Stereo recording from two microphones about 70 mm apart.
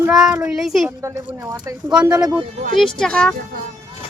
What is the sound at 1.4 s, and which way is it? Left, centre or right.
Speech, right.